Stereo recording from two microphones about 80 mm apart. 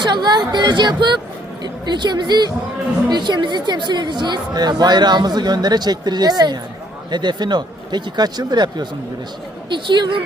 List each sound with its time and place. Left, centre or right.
0.0 s a woman's voice: right
7.1 s a woman's voice: right
9.6 s speech: right